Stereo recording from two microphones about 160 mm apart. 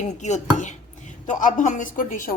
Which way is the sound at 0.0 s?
45° left (ahead or behind).